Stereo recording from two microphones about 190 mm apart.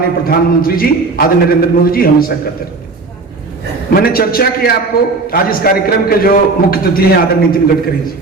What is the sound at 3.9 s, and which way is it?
A man's voice, 50° left (ahead or behind).